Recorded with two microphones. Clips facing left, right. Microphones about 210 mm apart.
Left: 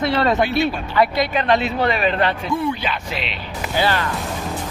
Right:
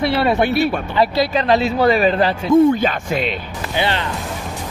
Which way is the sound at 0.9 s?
35° right (ahead or behind).